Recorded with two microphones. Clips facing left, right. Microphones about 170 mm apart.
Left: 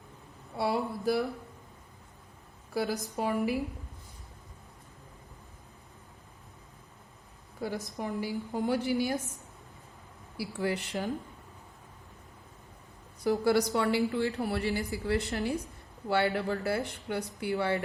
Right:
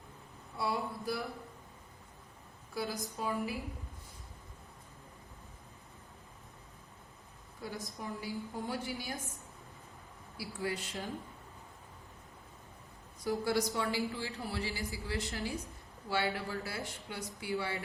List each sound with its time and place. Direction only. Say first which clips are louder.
0.5 s a woman's voice: left 6 dB; 70° left (ahead or behind)
2.7 s a woman's voice: left 7 dB; 70° left (ahead or behind)
7.9 s a woman's voice: left 6 dB; 75° left (ahead or behind)
10.3 s a woman's voice: left 6 dB; 65° left (ahead or behind)
13.2 s a woman's voice: left 6 dB; 65° left (ahead or behind)